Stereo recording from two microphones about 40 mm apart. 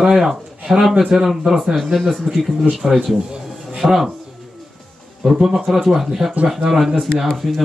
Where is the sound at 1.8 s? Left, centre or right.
Centre.